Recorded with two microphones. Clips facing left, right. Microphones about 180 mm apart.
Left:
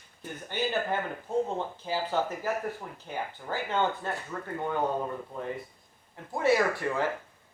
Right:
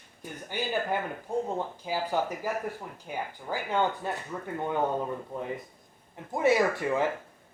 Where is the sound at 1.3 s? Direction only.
15° right (ahead or behind).